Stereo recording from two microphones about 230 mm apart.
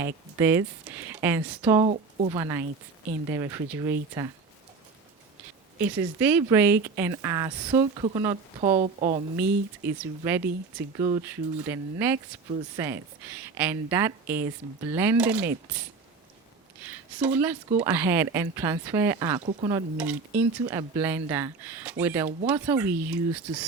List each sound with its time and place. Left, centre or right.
0.0 s speech: centre
1.8 s speech: right
2.3 s speech: centre
5.8 s speech: centre
8.6 s a woman's voice: right
10.2 s speech: centre
16.8 s a sound: centre
17.7 s speech: centre